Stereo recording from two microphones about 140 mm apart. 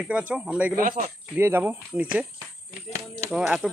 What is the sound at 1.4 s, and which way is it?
Speech, 15° right (ahead or behind).